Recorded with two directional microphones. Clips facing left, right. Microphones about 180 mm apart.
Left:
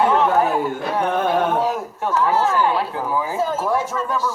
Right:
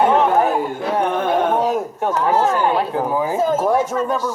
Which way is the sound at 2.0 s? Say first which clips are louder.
Right 1 dB; 15° right (ahead or behind).